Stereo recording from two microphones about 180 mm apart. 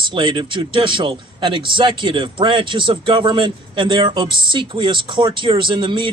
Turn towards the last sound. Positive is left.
turn(degrees=-25)  # may be behind; listen again after turning